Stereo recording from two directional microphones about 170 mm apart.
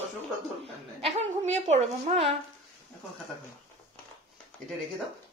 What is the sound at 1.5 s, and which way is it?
Child singing, 40° right (ahead or behind).